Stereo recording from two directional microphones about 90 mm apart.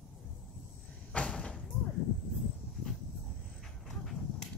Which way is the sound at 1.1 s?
10° left (ahead or behind).